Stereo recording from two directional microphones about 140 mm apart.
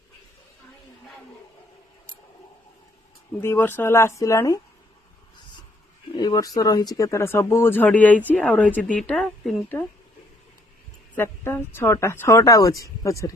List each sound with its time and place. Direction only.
3.4 s a woman's voice: 15° left (ahead or behind)
6.1 s a woman's voice: 25° left (ahead or behind); by 9.8 s 10° left (ahead or behind)
11.1 s a woman's voice: 15° left (ahead or behind)